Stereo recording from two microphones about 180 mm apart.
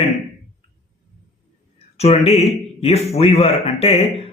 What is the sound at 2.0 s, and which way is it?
Speech, 35° left (ahead or behind).